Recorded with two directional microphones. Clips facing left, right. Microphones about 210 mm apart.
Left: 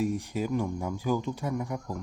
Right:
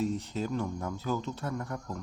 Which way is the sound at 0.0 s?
10° left (ahead or behind).